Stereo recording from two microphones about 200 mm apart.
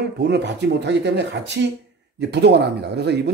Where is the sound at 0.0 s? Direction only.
55° right (ahead or behind).